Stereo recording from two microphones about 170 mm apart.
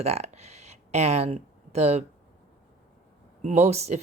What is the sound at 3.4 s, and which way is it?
Speech, 40° right (ahead or behind).